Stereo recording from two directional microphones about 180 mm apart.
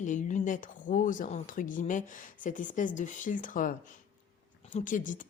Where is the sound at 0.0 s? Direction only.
45° left (ahead or behind).